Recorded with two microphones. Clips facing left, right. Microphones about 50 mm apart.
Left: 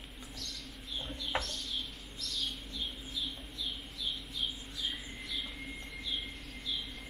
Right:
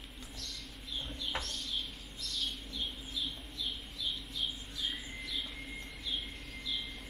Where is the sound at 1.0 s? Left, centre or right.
Centre.